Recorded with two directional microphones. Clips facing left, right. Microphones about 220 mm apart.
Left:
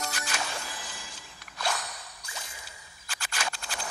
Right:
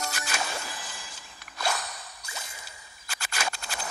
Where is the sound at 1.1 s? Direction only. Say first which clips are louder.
Right 1 dB; 5° right (ahead or behind).